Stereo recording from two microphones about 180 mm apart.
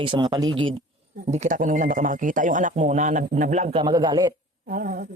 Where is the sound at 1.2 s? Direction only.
40° right (ahead or behind); by 4.3 s 25° right (ahead or behind).